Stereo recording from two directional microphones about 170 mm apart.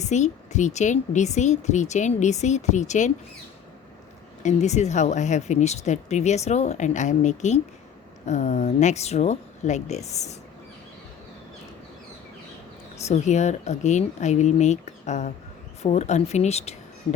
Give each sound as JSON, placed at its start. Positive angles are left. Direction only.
{"t": 0.0, "sound": "speech", "side_deg": 45}
{"t": 4.4, "sound": "speech", "side_deg": 40}
{"t": 13.0, "sound": "speech", "side_deg": 40}